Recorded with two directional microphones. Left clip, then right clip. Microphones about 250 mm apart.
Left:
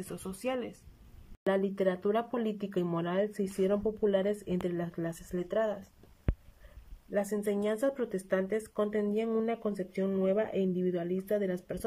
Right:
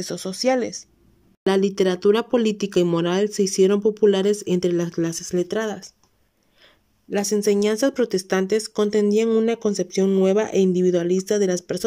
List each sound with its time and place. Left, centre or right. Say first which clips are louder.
0.0 s speech: right 14 dB; right
1.4 s speech: right 10 dB; right
7.1 s speech: right 11 dB; right